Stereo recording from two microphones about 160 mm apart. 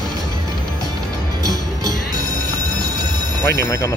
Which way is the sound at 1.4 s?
20° right (ahead or behind).